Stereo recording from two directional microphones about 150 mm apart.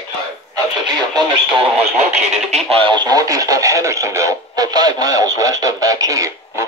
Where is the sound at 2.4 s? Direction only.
45° right (ahead or behind).